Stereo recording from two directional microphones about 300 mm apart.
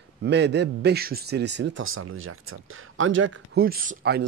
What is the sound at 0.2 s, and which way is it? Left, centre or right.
A man's voice, right.